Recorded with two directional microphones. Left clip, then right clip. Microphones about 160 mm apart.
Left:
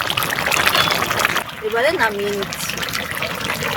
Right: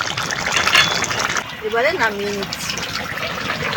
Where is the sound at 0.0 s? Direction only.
25° left (ahead or behind).